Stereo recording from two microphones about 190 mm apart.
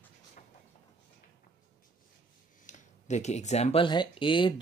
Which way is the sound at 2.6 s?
35° left (ahead or behind).